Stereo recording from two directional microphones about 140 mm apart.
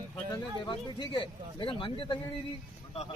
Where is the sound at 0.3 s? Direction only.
30° left (ahead or behind).